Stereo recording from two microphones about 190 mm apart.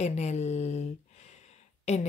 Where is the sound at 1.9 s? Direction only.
35° left (ahead or behind).